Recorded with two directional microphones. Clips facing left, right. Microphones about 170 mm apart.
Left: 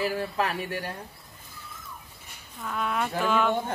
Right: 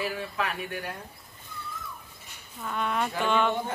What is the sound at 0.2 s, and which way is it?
Speech, 35° left (ahead or behind).